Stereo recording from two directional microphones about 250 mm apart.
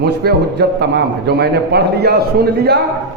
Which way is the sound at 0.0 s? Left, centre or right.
Right.